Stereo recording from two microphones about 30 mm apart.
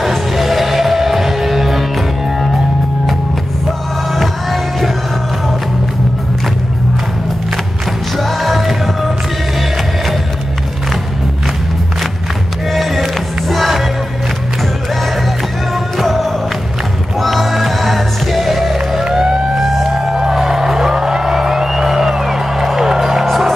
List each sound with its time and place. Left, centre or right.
0.0 s music: centre
4.1 s music: centre
8.2 s music: centre
12.7 s music: centre
15.7 s music: centre
19.0 s vehicle: right
19.6 s a sound: centre
20.2 s music: centre